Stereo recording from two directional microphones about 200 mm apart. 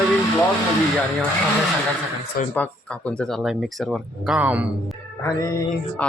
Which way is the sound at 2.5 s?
5° left (ahead or behind).